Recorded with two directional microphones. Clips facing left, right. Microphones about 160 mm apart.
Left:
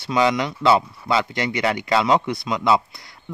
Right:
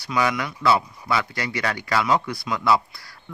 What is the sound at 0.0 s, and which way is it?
Speech, 25° left (ahead or behind).